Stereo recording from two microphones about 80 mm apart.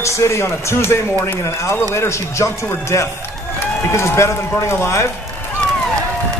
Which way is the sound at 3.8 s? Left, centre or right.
Left.